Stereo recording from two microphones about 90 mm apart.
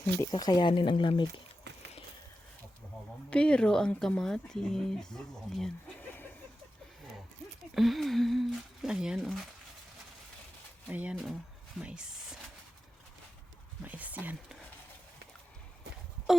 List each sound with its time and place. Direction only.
0.3 s speech: 45° left (ahead or behind)
0.6 s speech: 65° left (ahead or behind)
3.2 s speech: 10° left (ahead or behind)
7.7 s speech: centre (ahead or behind)
10.8 s speech: 15° right (ahead or behind)
11.1 s speech: centre (ahead or behind)
13.8 s speech: 15° right (ahead or behind)
16.3 s wail: 5° right (ahead or behind)